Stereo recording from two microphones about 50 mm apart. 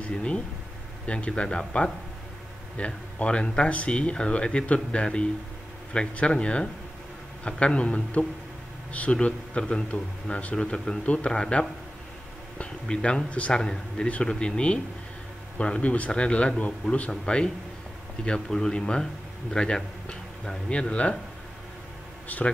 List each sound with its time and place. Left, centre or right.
0.0 s a man's voice: left